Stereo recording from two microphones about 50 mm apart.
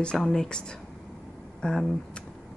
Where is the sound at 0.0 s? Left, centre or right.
Centre.